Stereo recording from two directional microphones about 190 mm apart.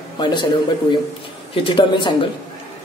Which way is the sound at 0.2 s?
25° left (ahead or behind).